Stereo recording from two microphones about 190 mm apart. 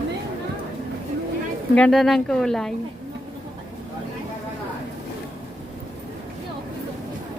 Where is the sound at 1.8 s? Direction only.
Centre (ahead or behind).